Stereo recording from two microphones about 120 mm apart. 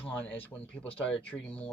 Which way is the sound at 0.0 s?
15° left (ahead or behind).